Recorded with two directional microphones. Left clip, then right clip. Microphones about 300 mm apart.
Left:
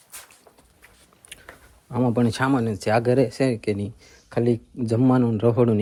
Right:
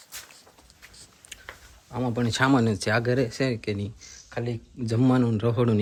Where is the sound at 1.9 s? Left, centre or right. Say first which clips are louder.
Left 5 dB; centre.